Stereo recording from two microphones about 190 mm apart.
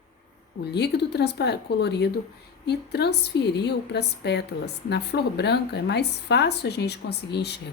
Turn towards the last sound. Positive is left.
turn(degrees=60)  # may be behind; listen again after turning